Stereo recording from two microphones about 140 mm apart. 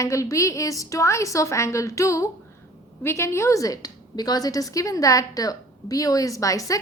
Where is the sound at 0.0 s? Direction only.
20° left (ahead or behind).